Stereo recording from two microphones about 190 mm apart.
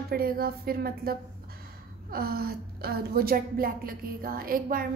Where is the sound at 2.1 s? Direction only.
55° right (ahead or behind).